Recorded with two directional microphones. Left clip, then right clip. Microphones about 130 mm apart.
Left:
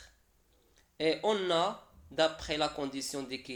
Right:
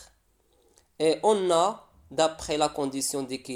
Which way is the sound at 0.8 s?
60° right (ahead or behind).